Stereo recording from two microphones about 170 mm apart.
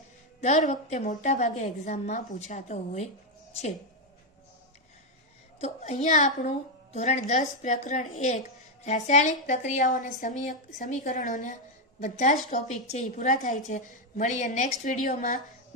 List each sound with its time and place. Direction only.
0.4 s a woman's voice: 45° left (ahead or behind)
5.5 s a woman's voice: 40° left (ahead or behind)